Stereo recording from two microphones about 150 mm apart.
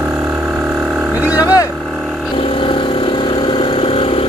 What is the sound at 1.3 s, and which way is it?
Vehicle, 25° left (ahead or behind).